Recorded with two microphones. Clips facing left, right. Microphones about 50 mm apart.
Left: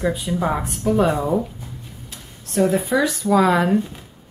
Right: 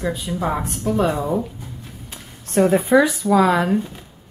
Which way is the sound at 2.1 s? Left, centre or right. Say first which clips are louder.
Right 5 dB; right.